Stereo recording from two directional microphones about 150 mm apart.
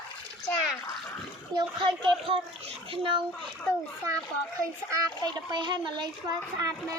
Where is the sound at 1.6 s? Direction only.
35° right (ahead or behind).